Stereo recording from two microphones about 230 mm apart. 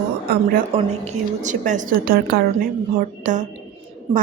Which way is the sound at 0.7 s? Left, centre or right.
Right.